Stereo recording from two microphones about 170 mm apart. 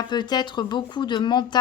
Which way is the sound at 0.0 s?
25° left (ahead or behind).